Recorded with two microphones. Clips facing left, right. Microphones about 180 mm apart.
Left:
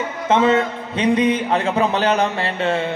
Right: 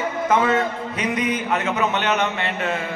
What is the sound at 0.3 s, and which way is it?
A man's voice, 25° left (ahead or behind).